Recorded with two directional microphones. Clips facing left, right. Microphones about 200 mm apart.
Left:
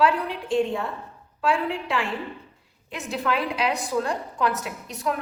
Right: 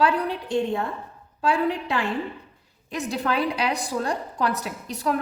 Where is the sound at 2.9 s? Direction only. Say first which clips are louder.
Right 1 dB; 35° right (ahead or behind).